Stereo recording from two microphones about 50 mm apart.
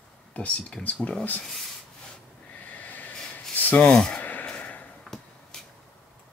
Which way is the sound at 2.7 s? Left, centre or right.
Left.